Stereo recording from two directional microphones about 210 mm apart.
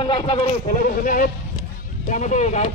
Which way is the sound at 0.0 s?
25° left (ahead or behind).